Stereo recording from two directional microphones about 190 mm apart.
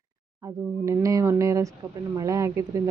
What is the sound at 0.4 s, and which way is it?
Speech, 15° right (ahead or behind).